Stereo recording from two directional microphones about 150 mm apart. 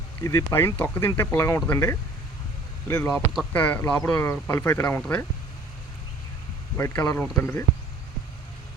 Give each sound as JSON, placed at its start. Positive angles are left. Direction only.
{"t": 0.2, "sound": "speech", "side_deg": 20}
{"t": 6.7, "sound": "speech", "side_deg": 15}